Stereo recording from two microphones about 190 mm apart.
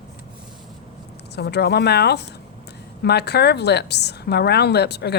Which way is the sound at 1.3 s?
60° left (ahead or behind).